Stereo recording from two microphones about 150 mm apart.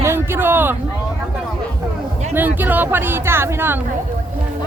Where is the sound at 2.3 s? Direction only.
10° right (ahead or behind).